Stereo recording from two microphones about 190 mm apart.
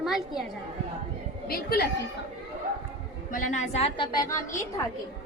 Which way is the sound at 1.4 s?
55° left (ahead or behind).